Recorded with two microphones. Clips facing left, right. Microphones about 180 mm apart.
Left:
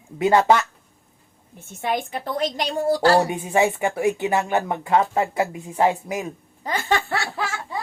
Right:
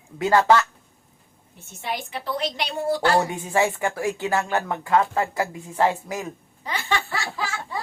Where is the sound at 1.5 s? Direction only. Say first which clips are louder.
Left 6 dB; 50° left (ahead or behind).